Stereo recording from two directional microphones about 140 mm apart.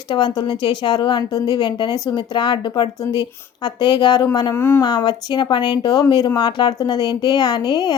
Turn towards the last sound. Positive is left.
turn(degrees=30)  # may be behind; listen again after turning